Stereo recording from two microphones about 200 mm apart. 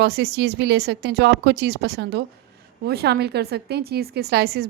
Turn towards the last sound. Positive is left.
turn(degrees=-55)  # may be behind; listen again after turning